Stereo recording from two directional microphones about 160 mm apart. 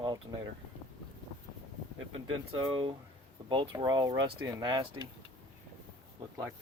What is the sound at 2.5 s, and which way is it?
Speech, 30° right (ahead or behind).